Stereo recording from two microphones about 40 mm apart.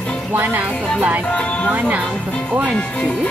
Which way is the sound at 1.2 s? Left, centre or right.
Left.